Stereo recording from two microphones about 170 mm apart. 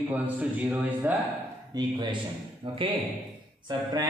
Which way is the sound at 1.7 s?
25° right (ahead or behind).